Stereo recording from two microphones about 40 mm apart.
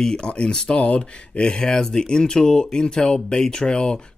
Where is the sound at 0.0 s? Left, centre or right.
Left.